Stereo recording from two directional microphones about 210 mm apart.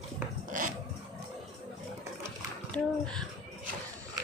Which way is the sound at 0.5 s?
40° right (ahead or behind).